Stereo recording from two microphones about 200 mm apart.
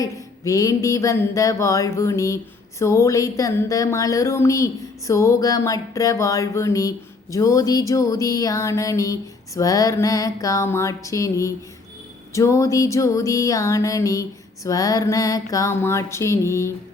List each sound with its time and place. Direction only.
0.0 s mantra: 15° left (ahead or behind)